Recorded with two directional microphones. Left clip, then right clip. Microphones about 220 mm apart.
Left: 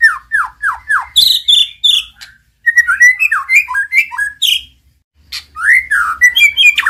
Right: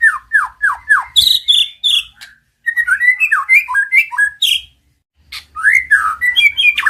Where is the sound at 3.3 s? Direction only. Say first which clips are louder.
Even; centre (ahead or behind).